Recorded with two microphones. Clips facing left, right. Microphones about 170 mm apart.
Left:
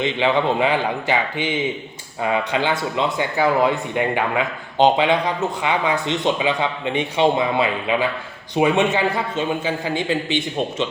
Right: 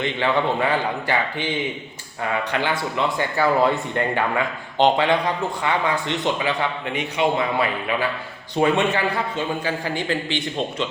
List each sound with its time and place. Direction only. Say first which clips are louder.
0.0 s a man's voice: left 2 dB; 20° left (ahead or behind)